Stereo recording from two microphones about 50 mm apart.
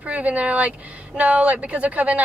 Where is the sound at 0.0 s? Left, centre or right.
Right.